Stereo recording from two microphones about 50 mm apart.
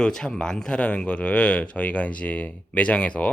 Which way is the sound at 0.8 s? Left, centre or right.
Left.